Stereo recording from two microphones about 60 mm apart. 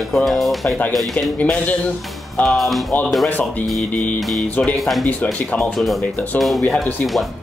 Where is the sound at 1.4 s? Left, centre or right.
Left.